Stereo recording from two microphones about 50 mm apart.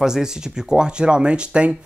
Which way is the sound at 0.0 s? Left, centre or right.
Centre.